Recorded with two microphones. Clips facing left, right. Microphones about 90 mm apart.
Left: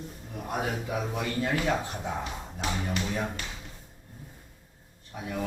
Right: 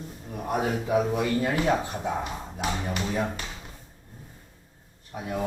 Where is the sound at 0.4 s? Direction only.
35° right (ahead or behind).